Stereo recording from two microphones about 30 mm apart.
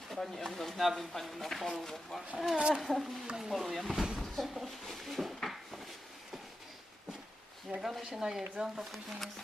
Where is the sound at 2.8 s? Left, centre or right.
Centre.